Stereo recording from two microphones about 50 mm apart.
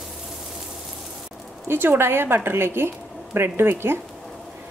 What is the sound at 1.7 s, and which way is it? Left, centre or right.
Speech, right.